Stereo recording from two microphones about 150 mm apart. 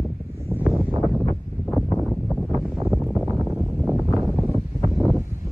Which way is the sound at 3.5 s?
5° right (ahead or behind).